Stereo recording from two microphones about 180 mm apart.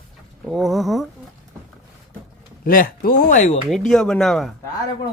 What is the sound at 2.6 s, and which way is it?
Speech, 50° left (ahead or behind).